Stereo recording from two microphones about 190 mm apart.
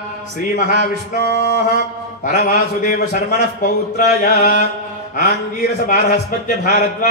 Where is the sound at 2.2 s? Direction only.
45° left (ahead or behind).